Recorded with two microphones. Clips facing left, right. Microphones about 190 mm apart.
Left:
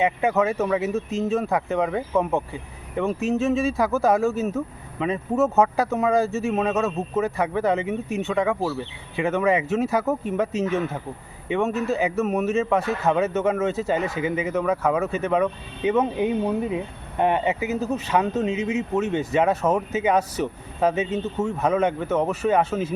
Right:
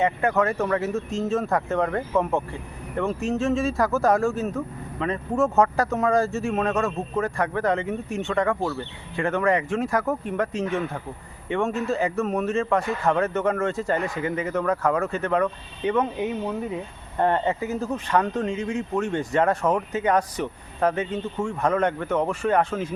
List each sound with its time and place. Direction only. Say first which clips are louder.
0.0 s speech: left 1 dB; 15° left (ahead or behind)
0.3 s speech: left 1 dB; 5° left (ahead or behind)
0.6 s speech: left 1 dB; 20° left (ahead or behind)
1.5 s speech: even; 5° left (ahead or behind)
3.0 s speech: left 2 dB; 15° left (ahead or behind)
3.5 s speech: left 1 dB; centre (ahead or behind)
12.2 s speech: left 2 dB; 20° left (ahead or behind)
12.5 s speech: left 1 dB; 5° left (ahead or behind)
14.0 s speech: left 2 dB; 15° left (ahead or behind)
21.0 s speech: left 3 dB; 20° left (ahead or behind)
21.6 s speech: left 1 dB; 5° left (ahead or behind)